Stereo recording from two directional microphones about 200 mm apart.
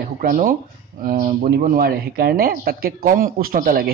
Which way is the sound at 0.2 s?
45° right (ahead or behind).